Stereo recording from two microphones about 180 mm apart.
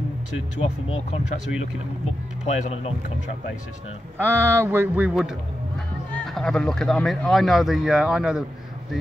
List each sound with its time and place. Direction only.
0.6 s speech: 35° left (ahead or behind)
2.4 s speech: 35° left (ahead or behind)
4.2 s speech: 15° right (ahead or behind)